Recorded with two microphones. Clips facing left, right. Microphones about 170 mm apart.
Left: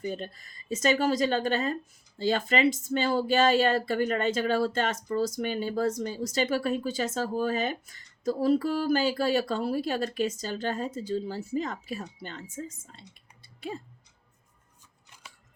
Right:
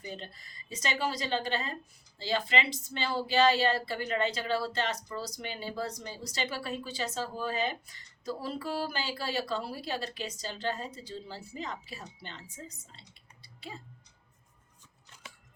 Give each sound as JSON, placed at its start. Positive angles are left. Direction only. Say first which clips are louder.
{"t": 0.0, "sound": "a woman's voice", "louder": "left 8 dB", "side_deg": 45}